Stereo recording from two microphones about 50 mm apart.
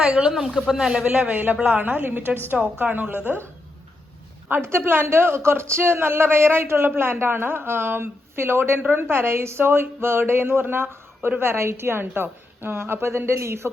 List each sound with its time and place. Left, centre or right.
0.2 s speech: centre
1.1 s a woman's voice: right
4.6 s speech: right